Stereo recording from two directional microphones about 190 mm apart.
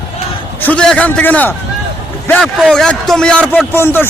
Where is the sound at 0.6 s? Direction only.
5° left (ahead or behind).